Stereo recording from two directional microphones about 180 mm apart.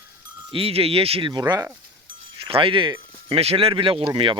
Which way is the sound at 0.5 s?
30° right (ahead or behind).